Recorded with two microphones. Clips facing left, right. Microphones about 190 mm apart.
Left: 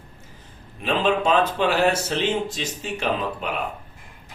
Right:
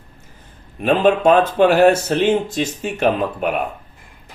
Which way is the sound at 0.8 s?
55° right (ahead or behind).